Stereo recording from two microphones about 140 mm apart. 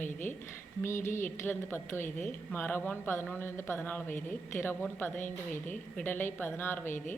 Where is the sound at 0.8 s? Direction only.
20° left (ahead or behind).